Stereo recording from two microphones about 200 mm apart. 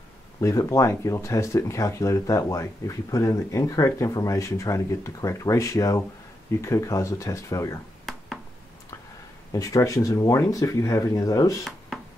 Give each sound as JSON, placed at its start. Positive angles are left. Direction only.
{"t": 0.4, "sound": "speech", "side_deg": 15}
{"t": 8.0, "sound": "a sound", "side_deg": 0}
{"t": 9.5, "sound": "speech", "side_deg": 15}